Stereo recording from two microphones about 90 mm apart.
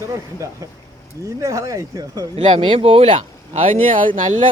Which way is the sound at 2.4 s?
65° right (ahead or behind).